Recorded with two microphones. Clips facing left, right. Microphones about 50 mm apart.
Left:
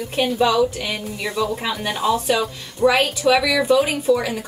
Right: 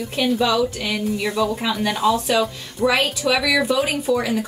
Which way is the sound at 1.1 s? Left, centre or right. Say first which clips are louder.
Even; centre.